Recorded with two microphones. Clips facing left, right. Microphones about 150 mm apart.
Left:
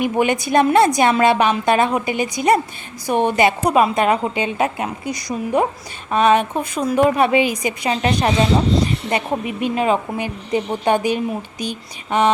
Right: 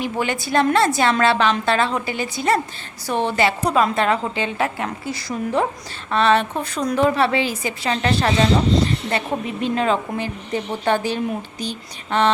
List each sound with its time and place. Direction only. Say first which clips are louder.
0.0 s a woman's voice: left 5 dB; 20° left (ahead or behind)